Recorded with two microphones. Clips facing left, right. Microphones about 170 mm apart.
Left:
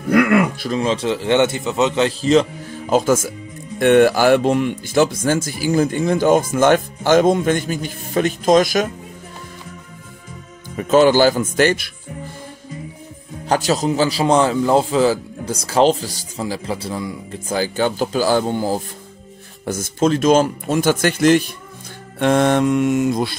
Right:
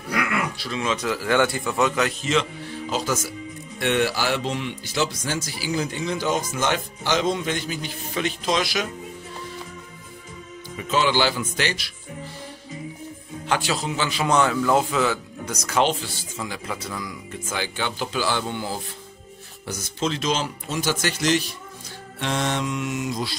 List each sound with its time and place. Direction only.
0.1 s speech: 55° left (ahead or behind)
10.8 s speech: 50° left (ahead or behind)
13.5 s a man's voice: 40° left (ahead or behind)